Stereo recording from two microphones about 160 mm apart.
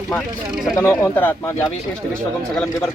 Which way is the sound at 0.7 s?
20° left (ahead or behind).